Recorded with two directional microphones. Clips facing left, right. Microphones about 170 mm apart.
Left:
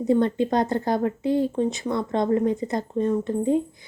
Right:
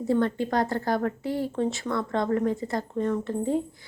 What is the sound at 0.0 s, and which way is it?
Speech, 20° left (ahead or behind).